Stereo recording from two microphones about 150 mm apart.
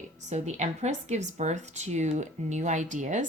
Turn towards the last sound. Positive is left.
turn(degrees=-55)  # may be behind; listen again after turning